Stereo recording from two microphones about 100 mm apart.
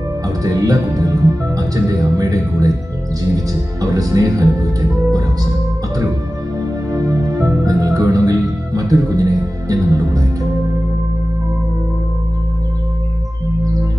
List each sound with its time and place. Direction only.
0.4 s speech: 35° right (ahead or behind)
6.9 s speech: 35° right (ahead or behind)